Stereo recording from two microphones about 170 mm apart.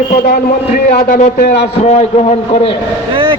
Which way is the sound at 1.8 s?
40° left (ahead or behind).